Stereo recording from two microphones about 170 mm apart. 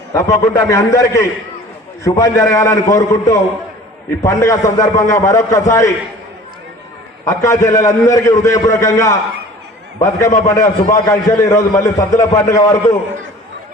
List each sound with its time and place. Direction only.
0.1 s a man's voice: 20° left (ahead or behind)
7.3 s a man's voice: 20° left (ahead or behind)